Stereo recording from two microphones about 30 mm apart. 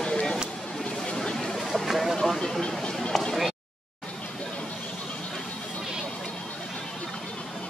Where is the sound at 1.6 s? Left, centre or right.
Centre.